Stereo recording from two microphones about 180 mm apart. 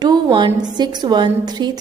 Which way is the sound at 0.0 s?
25° right (ahead or behind).